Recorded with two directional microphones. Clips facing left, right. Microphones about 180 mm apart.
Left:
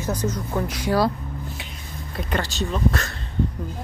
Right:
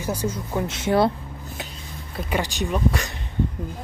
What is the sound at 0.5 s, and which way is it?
Speech, 25° right (ahead or behind).